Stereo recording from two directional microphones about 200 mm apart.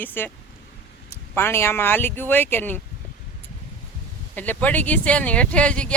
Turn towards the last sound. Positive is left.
turn(degrees=5)  # may be behind; listen again after turning